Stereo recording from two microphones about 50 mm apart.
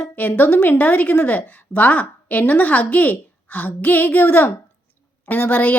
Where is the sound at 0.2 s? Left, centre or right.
Left.